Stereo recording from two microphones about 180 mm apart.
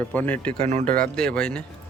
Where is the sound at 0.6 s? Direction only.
40° right (ahead or behind).